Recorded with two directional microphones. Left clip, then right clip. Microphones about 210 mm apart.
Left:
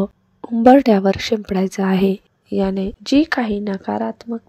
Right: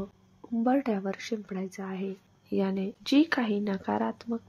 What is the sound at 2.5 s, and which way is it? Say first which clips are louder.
A woman's voice: left 10 dB; 30° left (ahead or behind).